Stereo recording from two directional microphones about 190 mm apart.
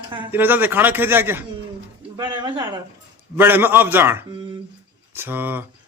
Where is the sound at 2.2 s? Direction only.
25° right (ahead or behind).